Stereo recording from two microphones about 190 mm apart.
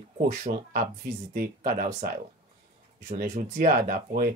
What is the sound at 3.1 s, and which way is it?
Speech, 45° right (ahead or behind).